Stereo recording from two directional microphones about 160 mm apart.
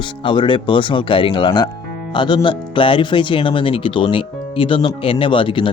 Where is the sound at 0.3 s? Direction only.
30° left (ahead or behind).